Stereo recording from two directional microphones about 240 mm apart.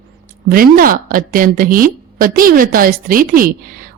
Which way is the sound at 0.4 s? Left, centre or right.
Right.